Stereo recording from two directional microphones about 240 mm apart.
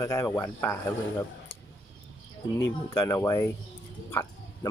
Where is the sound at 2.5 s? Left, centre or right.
Centre.